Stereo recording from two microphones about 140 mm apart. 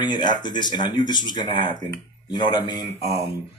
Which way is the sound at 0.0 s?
30° left (ahead or behind).